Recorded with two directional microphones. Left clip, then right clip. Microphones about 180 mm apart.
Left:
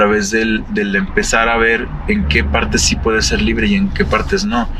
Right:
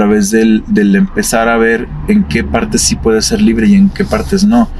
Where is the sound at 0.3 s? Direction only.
35° right (ahead or behind).